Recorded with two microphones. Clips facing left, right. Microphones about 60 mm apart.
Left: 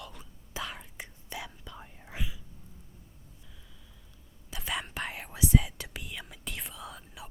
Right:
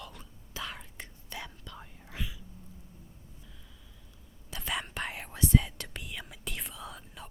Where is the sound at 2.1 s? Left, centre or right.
Centre.